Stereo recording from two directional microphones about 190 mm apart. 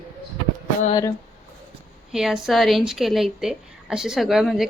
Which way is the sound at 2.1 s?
Centre (ahead or behind).